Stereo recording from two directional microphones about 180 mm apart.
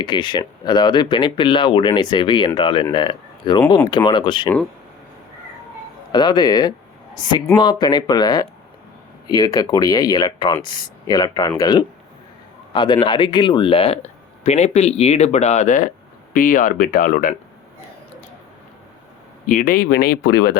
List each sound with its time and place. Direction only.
0.0 s speech: 25° left (ahead or behind)
6.1 s speech: 25° left (ahead or behind); by 17.3 s 50° left (ahead or behind)
19.5 s speech: 50° left (ahead or behind)